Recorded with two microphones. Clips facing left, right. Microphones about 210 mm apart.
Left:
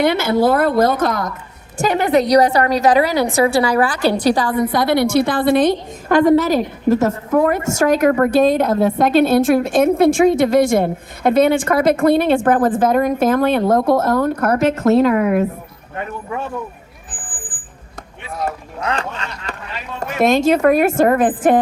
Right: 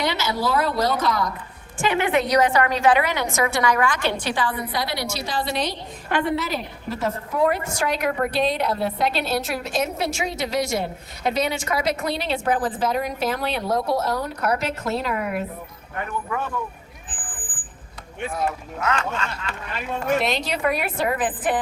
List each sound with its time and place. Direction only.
0.0 s a woman's voice: 55° left (ahead or behind)
1.8 s a woman's voice: 40° left (ahead or behind)
18.8 s a woman's voice: 35° left (ahead or behind)
20.0 s a woman's voice: 45° left (ahead or behind)